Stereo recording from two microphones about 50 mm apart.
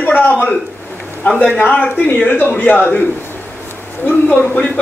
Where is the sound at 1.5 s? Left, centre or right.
Left.